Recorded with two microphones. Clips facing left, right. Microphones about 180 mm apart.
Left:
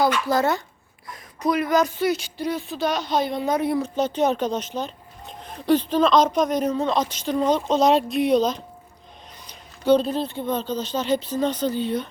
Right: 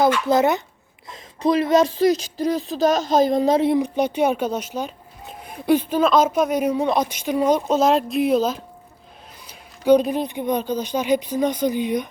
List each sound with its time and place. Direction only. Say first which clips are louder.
0.0 s speech: right 3 dB; 20° right (ahead or behind)
1.0 s a sound: right 3 dB; 25° right (ahead or behind)
2.0 s a woman's voice: right 5 dB; 40° right (ahead or behind)
3.5 s speech: right 5 dB; 25° right (ahead or behind)
3.8 s speech: right 2 dB; 15° right (ahead or behind)